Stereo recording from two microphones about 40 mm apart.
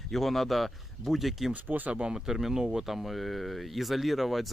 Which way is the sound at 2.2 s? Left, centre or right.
Centre.